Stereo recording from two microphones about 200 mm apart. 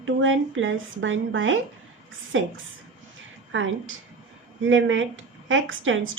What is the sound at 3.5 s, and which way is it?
A woman's voice, 75° right (ahead or behind).